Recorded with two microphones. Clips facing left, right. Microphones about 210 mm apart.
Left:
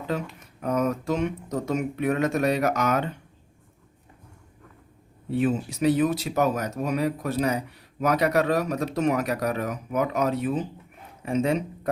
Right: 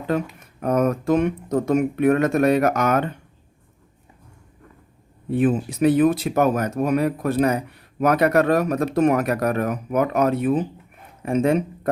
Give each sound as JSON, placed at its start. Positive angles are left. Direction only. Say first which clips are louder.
{"t": 0.6, "sound": "speech", "louder": "right 5 dB", "side_deg": -55}
{"t": 5.3, "sound": "speech", "louder": "right 4 dB", "side_deg": -55}